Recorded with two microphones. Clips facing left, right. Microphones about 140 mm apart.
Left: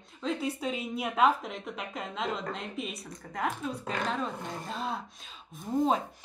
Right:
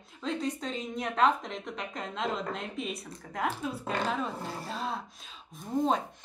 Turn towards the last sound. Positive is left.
turn(degrees=0)  # may be behind; listen again after turning